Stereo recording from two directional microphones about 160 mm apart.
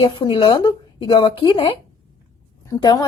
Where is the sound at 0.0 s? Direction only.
30° left (ahead or behind).